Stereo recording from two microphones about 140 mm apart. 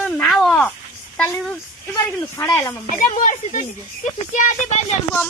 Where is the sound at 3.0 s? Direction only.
65° left (ahead or behind).